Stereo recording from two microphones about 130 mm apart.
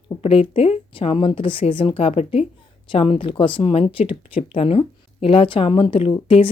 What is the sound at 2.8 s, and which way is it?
A woman's voice, 40° left (ahead or behind).